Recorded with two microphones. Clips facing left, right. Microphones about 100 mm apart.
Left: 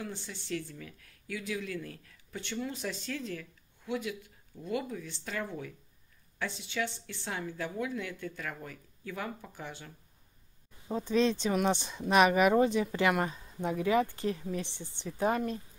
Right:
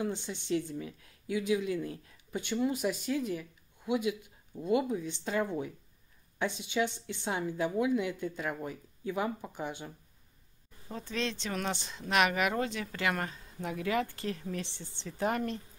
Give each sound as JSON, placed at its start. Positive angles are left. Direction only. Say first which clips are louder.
{"t": 0.0, "sound": "speech", "louder": "right 6 dB", "side_deg": -20}
{"t": 10.9, "sound": "speech", "louder": "left 8 dB", "side_deg": 15}